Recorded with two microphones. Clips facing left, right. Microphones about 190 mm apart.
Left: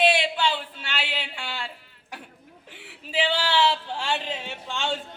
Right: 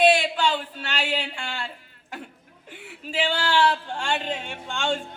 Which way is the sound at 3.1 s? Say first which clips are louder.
Even; 5° left (ahead or behind).